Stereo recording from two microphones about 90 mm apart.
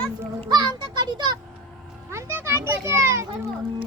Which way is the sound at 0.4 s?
55° right (ahead or behind).